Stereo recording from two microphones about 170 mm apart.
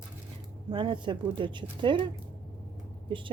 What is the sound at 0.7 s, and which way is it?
Speech, 30° right (ahead or behind).